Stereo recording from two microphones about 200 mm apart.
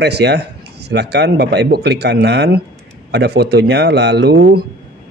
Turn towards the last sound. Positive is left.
turn(degrees=-55)  # may be behind; listen again after turning